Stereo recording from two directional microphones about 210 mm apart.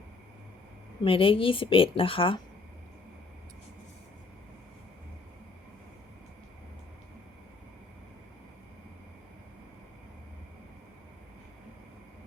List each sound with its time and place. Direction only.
1.0 s a woman's voice: 25° left (ahead or behind)